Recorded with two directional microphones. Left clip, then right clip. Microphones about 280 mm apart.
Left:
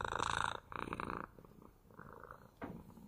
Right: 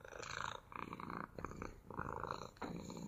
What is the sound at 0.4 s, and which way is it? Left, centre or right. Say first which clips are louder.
Purr: left 6 dB; centre.